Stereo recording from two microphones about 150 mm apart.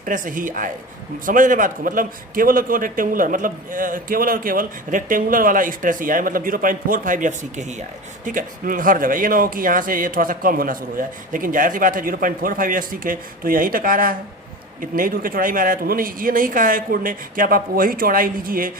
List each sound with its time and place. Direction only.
0.0 s a man's voice: 60° right (ahead or behind)